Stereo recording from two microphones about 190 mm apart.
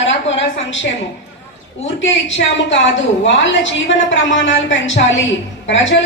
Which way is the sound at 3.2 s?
75° left (ahead or behind).